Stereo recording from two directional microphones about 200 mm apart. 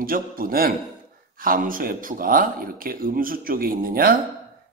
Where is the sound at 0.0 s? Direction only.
45° right (ahead or behind).